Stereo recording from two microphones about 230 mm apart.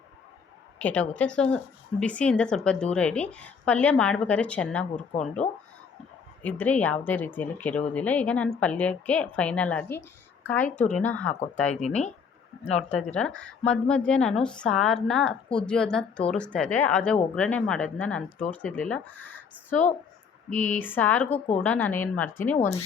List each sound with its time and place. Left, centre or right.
0.8 s a woman's voice: centre
5.4 s speech: left
6.4 s a woman's voice: centre
11.7 s speech: left
13.1 s a woman's voice: centre
20.5 s speech: left
20.7 s speech: centre